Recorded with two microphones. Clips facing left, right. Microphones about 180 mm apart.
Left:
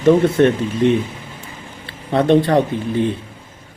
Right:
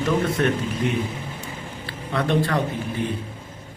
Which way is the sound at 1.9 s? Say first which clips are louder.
Left 9 dB; 25° left (ahead or behind).